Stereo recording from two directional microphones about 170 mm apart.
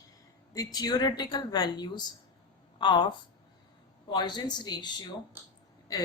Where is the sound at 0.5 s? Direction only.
20° left (ahead or behind).